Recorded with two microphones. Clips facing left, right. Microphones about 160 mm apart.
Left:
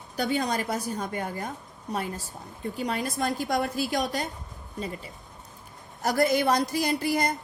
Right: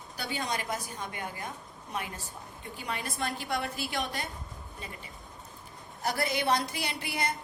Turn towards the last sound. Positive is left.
turn(degrees=40)  # may be behind; listen again after turning